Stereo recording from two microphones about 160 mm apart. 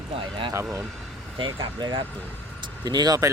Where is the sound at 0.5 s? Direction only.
20° right (ahead or behind).